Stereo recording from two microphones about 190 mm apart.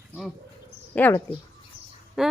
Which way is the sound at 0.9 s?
10° left (ahead or behind).